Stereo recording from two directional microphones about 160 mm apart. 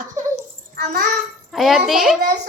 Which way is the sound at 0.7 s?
75° right (ahead or behind).